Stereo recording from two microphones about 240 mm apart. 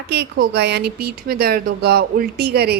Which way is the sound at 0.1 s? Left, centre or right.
Right.